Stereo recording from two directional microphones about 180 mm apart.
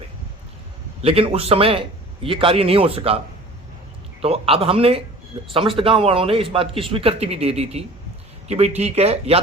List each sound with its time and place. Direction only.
1.0 s a man's voice: 30° right (ahead or behind)
4.2 s a man's voice: 30° right (ahead or behind)